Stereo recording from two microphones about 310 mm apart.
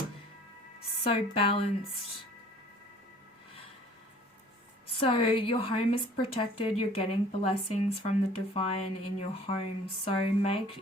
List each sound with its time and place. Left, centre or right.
1.1 s a woman's voice: centre
4.9 s a woman's voice: centre